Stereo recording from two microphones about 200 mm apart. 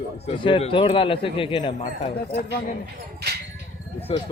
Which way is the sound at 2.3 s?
50° left (ahead or behind).